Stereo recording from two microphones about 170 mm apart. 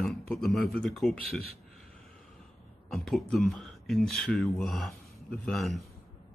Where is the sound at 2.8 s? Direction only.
Centre (ahead or behind).